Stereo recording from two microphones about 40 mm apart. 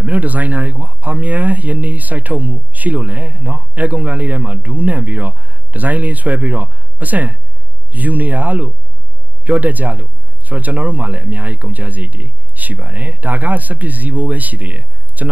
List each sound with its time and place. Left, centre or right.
0.0 s speech: right